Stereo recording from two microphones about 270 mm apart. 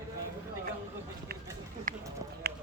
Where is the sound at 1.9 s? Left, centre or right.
Right.